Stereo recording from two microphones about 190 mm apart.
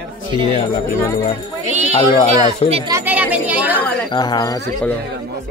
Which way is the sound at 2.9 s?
10° right (ahead or behind).